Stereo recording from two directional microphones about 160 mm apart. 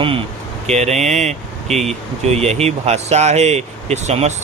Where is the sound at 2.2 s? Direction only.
40° right (ahead or behind).